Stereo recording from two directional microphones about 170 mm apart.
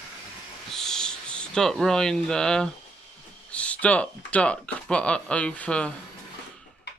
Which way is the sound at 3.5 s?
5° left (ahead or behind).